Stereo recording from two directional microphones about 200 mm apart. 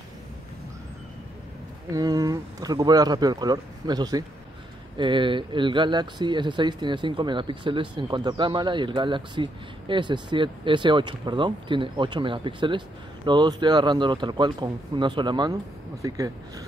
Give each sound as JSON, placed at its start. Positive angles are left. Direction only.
{"t": 1.9, "sound": "speech", "side_deg": -20}